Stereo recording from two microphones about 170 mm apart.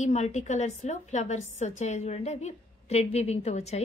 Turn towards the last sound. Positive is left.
turn(degrees=40)  # may be behind; listen again after turning